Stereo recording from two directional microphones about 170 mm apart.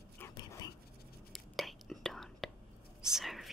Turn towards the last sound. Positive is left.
turn(degrees=0)  # may be behind; listen again after turning